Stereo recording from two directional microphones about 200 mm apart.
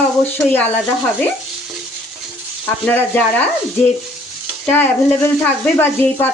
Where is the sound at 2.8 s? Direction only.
10° left (ahead or behind).